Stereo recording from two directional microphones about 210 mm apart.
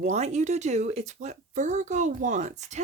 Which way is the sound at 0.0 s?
35° right (ahead or behind).